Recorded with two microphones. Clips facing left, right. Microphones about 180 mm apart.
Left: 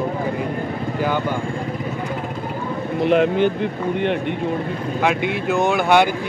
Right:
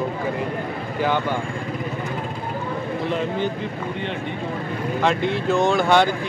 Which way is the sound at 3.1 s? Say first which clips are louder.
Left 9 dB; 70° left (ahead or behind).